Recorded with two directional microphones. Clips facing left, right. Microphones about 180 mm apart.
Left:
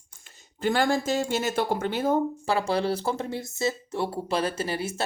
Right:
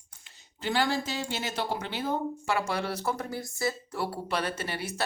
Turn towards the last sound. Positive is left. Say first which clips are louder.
# left 5 dB
turn(degrees=25)  # may be behind; listen again after turning